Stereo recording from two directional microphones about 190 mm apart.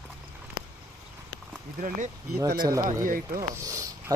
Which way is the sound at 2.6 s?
20° right (ahead or behind).